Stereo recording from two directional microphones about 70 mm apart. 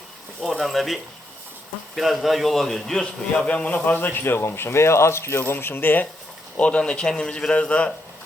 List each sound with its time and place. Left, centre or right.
0.5 s a man's voice: centre
2.0 s a man's voice: centre
3.4 s a man's voice: left
6.6 s a man's voice: centre